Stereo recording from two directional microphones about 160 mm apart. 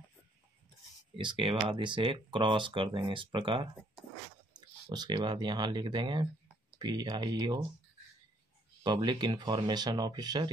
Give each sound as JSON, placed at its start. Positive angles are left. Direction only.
{"t": 1.1, "sound": "speech", "side_deg": -30}
{"t": 8.8, "sound": "speech", "side_deg": -25}